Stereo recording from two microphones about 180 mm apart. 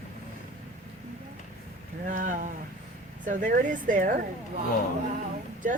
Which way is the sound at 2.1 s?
45° right (ahead or behind).